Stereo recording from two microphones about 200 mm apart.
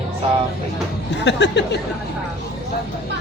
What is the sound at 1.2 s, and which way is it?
Speech, 60° left (ahead or behind).